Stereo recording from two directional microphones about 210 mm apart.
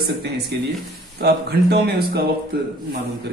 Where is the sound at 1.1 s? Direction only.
50° right (ahead or behind).